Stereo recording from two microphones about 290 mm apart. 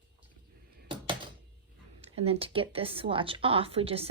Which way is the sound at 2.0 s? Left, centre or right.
Centre.